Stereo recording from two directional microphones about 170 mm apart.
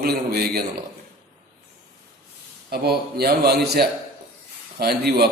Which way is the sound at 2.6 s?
65° right (ahead or behind).